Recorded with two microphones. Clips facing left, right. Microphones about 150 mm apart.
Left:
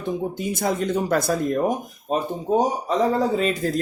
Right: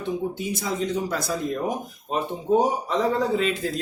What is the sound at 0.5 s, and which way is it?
Speech, 55° left (ahead or behind).